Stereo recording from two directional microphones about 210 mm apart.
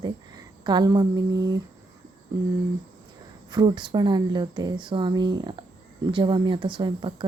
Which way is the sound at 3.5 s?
20° right (ahead or behind).